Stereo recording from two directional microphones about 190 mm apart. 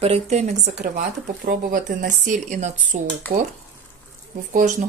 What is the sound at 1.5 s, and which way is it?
Speech, 50° right (ahead or behind).